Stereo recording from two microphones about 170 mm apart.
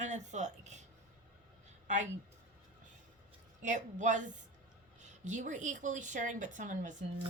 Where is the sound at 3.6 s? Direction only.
45° right (ahead or behind).